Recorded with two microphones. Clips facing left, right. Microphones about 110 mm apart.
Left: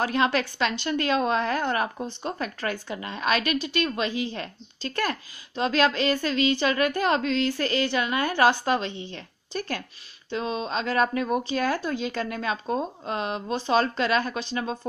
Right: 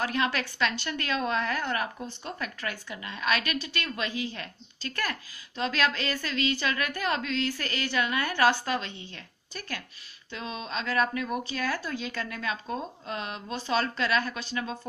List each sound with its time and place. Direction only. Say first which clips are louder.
0.0 s a woman's voice: left 5 dB; 30° left (ahead or behind)